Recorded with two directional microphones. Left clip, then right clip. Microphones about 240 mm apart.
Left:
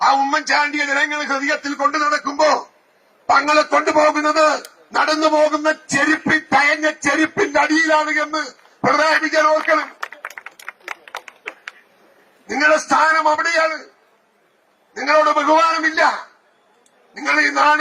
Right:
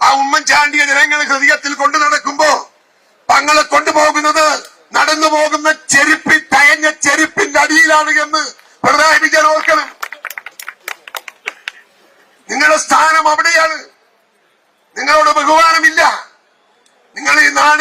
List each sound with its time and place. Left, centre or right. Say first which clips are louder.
0.0 s a sound: right 5 dB; centre
0.6 s speech: right 8 dB; centre
2.2 s a sound: right 4 dB; centre
3.4 s speech: right 5 dB; centre
8.4 s speech: right 5 dB; centre
10.0 s a sound: right 6 dB; centre
12.5 s speech: right 5 dB; centre
14.9 s speech: right 5 dB; centre
17.2 s speech: right 6 dB; centre